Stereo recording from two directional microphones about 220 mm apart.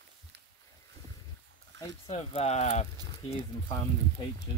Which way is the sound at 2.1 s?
30° left (ahead or behind).